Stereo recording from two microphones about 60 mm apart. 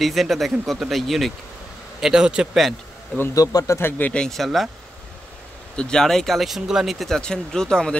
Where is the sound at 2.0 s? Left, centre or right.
Centre.